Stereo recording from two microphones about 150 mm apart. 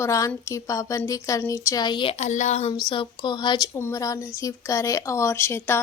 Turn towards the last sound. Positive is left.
turn(degrees=15)  # may be behind; listen again after turning